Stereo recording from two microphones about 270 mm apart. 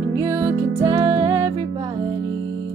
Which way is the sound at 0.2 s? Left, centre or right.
Centre.